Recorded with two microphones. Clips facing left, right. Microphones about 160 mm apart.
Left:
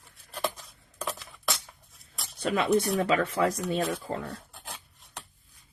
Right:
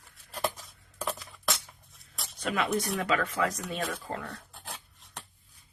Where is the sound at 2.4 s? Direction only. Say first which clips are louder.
Left 5 dB; 30° left (ahead or behind).